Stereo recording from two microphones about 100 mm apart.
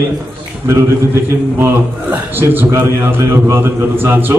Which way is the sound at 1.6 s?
25° right (ahead or behind).